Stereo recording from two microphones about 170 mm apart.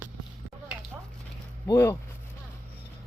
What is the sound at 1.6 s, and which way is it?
Speech, 15° left (ahead or behind).